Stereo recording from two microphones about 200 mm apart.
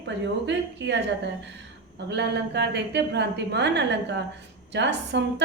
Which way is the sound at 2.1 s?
55° right (ahead or behind).